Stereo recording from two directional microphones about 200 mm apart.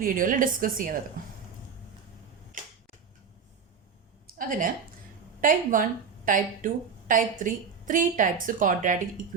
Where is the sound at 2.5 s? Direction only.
40° right (ahead or behind).